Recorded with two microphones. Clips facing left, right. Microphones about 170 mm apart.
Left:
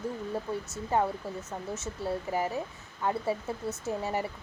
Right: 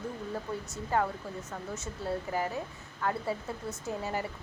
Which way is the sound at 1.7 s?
Centre (ahead or behind).